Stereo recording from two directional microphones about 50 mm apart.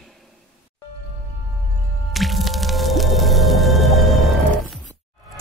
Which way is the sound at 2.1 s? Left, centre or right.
Centre.